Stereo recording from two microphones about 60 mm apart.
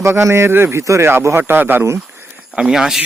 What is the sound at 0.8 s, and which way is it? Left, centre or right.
Speech, right.